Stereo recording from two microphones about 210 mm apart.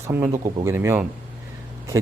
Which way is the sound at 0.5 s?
10° right (ahead or behind).